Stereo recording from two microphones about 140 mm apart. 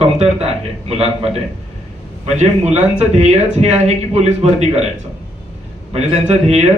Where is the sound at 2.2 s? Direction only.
55° right (ahead or behind).